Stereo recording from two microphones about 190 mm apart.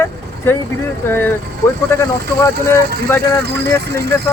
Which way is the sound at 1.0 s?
10° left (ahead or behind).